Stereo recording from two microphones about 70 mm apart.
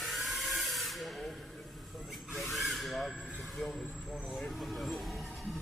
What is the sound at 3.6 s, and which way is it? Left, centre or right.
Speech, centre.